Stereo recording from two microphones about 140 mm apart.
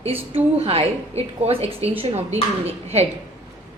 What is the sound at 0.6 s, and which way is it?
A woman's voice, 45° right (ahead or behind).